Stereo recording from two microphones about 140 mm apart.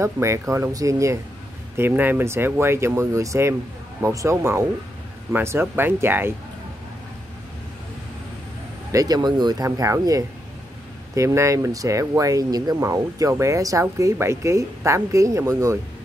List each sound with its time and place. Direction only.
0.0 s speech: 20° right (ahead or behind)
8.9 s speech: 25° right (ahead or behind)